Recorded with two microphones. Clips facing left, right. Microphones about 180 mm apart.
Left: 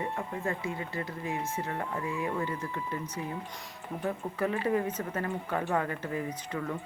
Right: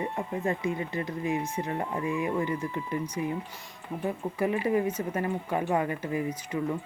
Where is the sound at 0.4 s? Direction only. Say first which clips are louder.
Right 6 dB; 20° right (ahead or behind).